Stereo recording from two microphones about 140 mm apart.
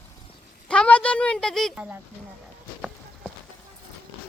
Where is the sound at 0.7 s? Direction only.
10° left (ahead or behind).